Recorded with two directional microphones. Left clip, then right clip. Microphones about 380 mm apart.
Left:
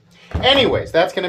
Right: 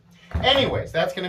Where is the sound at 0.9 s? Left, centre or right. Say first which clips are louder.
Left 7 dB; centre.